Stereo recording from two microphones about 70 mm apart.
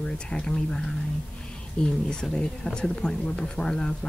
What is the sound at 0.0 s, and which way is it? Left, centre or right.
Speech, centre.